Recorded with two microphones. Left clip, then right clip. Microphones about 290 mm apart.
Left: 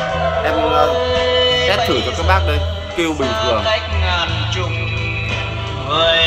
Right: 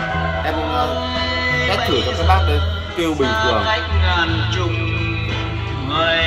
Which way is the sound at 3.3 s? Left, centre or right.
Left.